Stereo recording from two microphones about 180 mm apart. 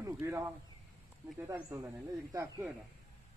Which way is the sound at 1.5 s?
15° right (ahead or behind).